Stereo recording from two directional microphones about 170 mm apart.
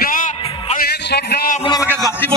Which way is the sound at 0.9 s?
70° left (ahead or behind).